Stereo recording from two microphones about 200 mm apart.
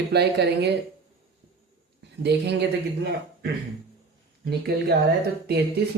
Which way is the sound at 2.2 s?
60° right (ahead or behind).